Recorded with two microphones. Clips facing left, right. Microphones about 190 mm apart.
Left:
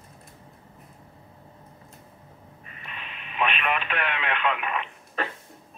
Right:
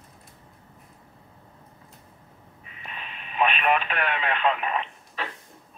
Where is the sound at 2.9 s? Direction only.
40° right (ahead or behind).